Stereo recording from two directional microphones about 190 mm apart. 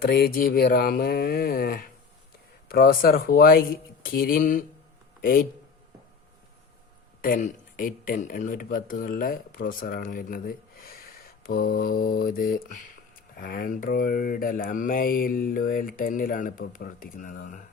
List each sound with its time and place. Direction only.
0.0 s mantra: 55° left (ahead or behind)
5.2 s speech: 50° left (ahead or behind)
7.2 s speech: 45° left (ahead or behind)
13.3 s mantra: 50° left (ahead or behind)